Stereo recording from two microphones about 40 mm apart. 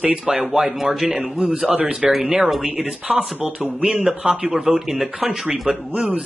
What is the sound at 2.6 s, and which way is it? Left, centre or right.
Speech, right.